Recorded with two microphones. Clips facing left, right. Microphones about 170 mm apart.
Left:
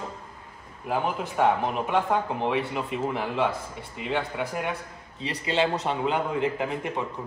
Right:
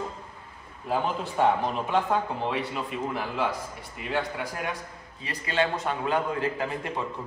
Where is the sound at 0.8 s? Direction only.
15° left (ahead or behind).